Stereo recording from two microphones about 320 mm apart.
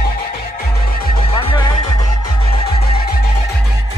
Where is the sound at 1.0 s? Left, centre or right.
Centre.